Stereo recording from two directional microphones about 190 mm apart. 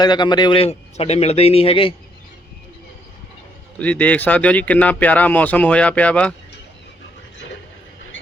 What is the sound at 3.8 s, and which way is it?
Speech, 10° left (ahead or behind).